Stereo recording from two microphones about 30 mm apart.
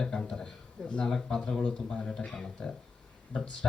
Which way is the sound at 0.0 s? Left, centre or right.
Centre.